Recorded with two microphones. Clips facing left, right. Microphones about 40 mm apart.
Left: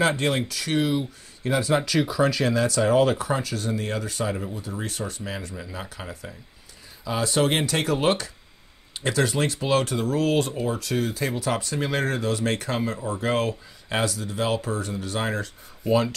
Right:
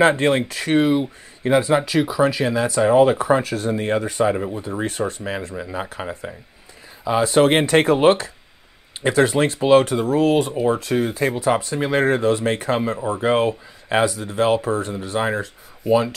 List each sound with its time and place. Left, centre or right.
0.0 s speech: right
10.7 s speech: right
15.8 s speech: centre